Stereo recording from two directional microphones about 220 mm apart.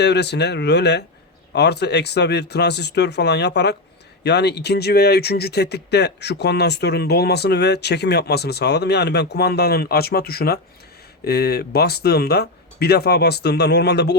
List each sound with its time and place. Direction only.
0.0 s speech: 50° left (ahead or behind)